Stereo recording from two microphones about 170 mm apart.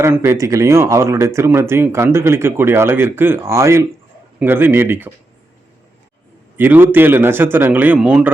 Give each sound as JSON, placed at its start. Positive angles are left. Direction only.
{"t": 0.0, "sound": "speech", "side_deg": -15}
{"t": 6.6, "sound": "speech", "side_deg": -10}